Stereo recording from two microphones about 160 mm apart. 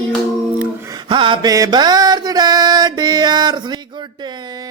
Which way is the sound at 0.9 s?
30° right (ahead or behind).